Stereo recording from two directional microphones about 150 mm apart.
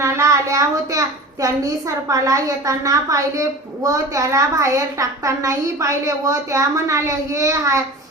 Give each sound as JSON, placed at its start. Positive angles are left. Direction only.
{"t": 0.0, "sound": "a child's voice", "side_deg": -20}